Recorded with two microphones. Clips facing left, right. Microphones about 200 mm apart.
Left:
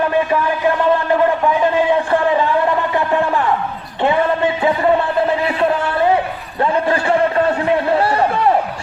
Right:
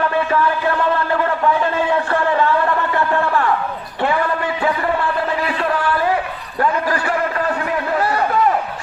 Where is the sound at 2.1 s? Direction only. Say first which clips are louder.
Left 2 dB; 15° left (ahead or behind).